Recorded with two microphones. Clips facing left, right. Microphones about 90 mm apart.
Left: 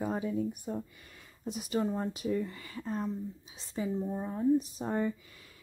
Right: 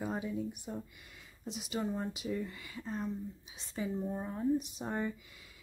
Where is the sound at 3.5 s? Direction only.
35° left (ahead or behind).